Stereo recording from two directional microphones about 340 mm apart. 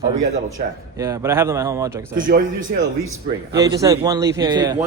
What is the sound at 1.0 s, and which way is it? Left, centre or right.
A man's voice, centre.